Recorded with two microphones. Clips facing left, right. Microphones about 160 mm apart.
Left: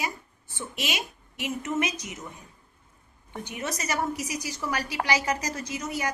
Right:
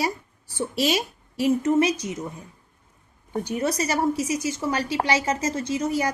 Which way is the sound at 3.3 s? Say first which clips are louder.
Right 9 dB; 35° right (ahead or behind).